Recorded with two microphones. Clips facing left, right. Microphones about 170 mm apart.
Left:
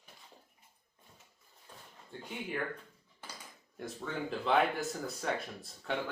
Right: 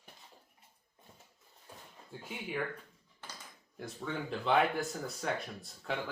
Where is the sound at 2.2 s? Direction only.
Centre (ahead or behind).